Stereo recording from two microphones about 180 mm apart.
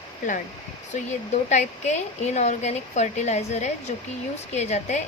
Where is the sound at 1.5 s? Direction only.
40° left (ahead or behind).